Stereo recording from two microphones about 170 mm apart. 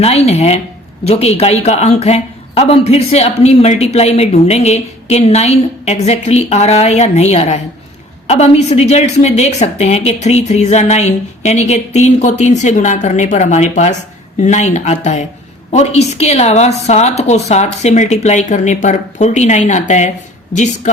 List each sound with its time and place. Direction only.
0.0 s speech: 40° left (ahead or behind)